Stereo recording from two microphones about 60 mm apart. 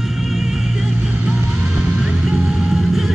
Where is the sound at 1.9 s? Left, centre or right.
Centre.